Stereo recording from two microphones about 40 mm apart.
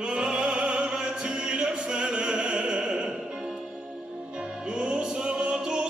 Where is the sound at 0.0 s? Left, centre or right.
Right.